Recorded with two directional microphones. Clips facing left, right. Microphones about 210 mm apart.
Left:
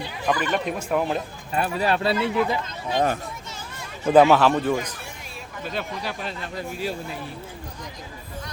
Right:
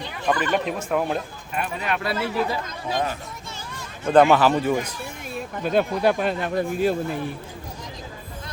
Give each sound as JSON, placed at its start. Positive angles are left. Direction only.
{"t": 0.0, "sound": "a sound", "side_deg": 10}
{"t": 0.5, "sound": "a man's voice", "side_deg": 0}
{"t": 1.5, "sound": "speech", "side_deg": 35}
{"t": 4.0, "sound": "a man's voice", "side_deg": 5}
{"t": 5.6, "sound": "speech", "side_deg": -50}